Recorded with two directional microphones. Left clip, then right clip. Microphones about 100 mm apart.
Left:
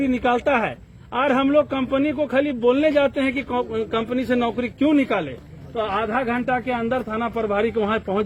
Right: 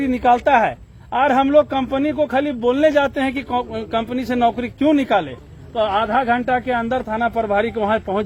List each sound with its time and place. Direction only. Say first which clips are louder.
0.2 s speech: right 8 dB; 65° right (ahead or behind)
0.4 s speech: right 6 dB; 50° right (ahead or behind); by 8.2 s 65° right (ahead or behind)